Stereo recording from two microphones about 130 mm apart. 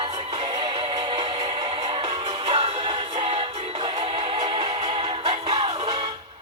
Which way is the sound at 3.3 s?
50° right (ahead or behind).